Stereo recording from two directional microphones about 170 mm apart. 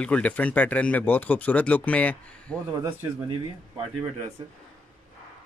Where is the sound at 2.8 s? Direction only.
15° right (ahead or behind).